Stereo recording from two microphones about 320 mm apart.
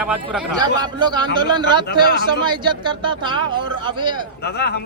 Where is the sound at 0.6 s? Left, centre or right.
Centre.